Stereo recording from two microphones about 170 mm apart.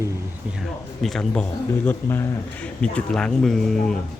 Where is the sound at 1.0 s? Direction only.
5° left (ahead or behind).